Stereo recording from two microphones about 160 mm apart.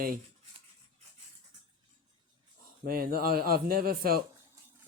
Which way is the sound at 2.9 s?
65° right (ahead or behind).